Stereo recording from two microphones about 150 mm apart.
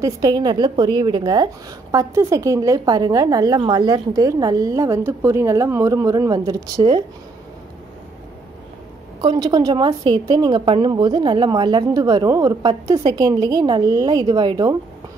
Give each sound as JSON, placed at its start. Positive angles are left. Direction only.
{"t": 0.0, "sound": "a woman's voice", "side_deg": -25}
{"t": 9.2, "sound": "a woman's voice", "side_deg": -30}